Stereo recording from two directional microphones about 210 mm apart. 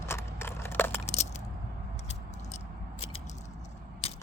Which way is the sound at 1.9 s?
30° left (ahead or behind).